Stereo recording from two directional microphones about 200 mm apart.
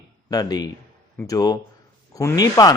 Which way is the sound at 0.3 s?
20° left (ahead or behind).